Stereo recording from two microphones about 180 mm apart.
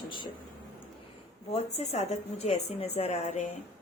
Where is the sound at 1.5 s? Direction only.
35° left (ahead or behind).